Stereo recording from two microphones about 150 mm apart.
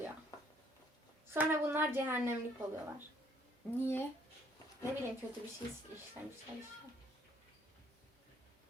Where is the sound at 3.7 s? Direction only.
15° left (ahead or behind).